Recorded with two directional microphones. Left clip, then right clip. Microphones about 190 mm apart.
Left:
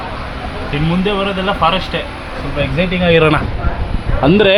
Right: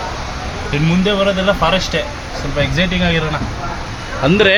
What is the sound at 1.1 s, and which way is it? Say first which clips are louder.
Speech: right 3 dB; 10° right (ahead or behind).